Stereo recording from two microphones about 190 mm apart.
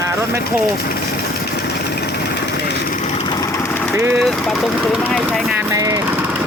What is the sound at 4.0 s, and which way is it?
Speech, 15° right (ahead or behind).